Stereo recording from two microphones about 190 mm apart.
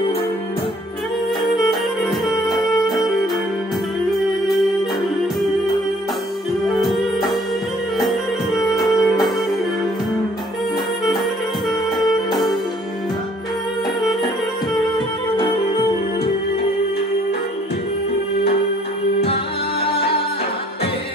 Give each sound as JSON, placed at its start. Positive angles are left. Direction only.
{"t": 1.6, "sound": "music", "side_deg": 0}
{"t": 6.7, "sound": "music", "side_deg": 0}
{"t": 8.0, "sound": "music", "side_deg": 0}
{"t": 15.3, "sound": "music", "side_deg": 25}